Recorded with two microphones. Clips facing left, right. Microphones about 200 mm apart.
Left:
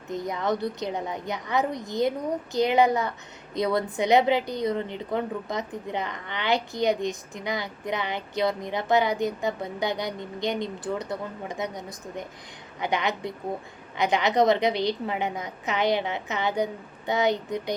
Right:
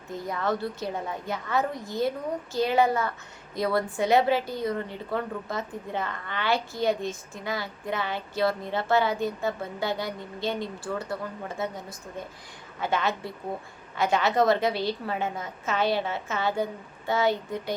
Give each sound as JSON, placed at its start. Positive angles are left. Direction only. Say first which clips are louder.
{"t": 0.1, "sound": "a woman's voice", "louder": "left 2 dB", "side_deg": 20}